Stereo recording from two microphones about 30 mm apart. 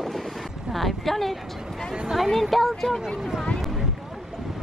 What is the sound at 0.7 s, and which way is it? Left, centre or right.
A woman's voice, centre.